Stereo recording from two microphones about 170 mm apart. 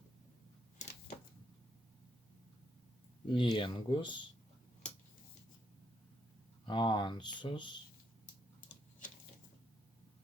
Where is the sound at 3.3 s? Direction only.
30° left (ahead or behind).